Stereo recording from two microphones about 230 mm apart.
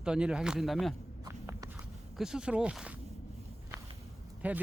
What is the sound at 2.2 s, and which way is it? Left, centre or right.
Speech, centre.